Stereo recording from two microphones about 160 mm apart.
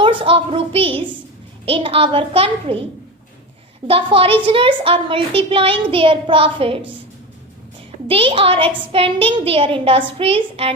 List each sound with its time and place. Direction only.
0.2 s a child's voice: 35° right (ahead or behind)
3.8 s a child's voice: 35° right (ahead or behind)
8.0 s a child's voice: 35° right (ahead or behind)